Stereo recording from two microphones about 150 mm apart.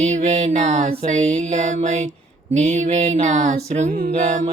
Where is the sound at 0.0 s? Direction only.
50° right (ahead or behind).